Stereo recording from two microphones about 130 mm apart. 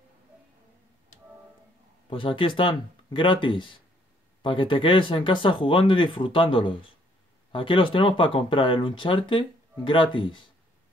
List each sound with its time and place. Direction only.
2.0 s speech: 40° left (ahead or behind)